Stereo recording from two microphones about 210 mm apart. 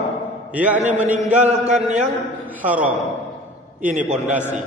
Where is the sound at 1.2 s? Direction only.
35° right (ahead or behind).